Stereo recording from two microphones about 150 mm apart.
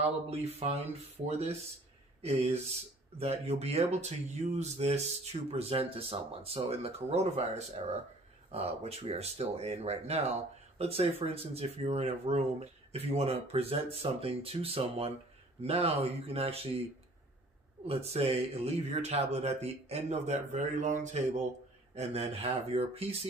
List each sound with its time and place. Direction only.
0.3 s speech: 45° right (ahead or behind)
17.8 s speech: 45° right (ahead or behind)